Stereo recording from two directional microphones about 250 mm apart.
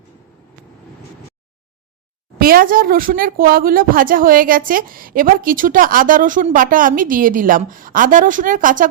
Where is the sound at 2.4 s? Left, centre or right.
Right.